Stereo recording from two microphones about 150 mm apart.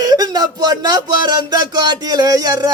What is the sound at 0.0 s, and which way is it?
Speech, 25° right (ahead or behind).